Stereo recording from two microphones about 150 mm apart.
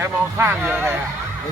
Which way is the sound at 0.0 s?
15° right (ahead or behind).